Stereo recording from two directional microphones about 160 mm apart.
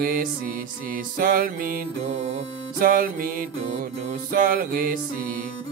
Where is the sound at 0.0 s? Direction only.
65° right (ahead or behind).